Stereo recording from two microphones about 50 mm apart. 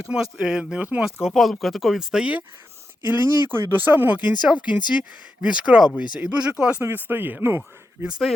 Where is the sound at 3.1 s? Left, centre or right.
Right.